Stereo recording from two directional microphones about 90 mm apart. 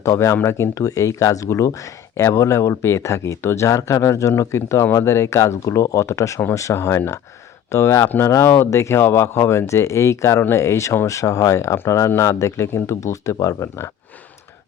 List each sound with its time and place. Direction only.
0.0 s speech: 35° left (ahead or behind)